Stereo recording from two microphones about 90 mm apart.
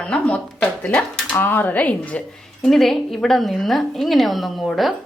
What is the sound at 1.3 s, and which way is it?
Speech, 25° left (ahead or behind).